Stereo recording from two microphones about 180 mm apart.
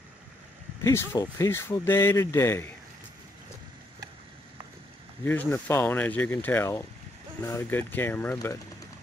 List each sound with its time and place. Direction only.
0.8 s speech: 20° left (ahead or behind)
5.2 s speech: 10° left (ahead or behind)